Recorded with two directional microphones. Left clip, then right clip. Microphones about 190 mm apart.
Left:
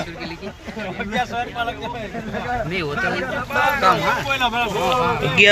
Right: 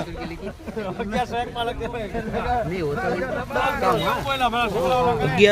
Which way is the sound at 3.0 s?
50° right (ahead or behind).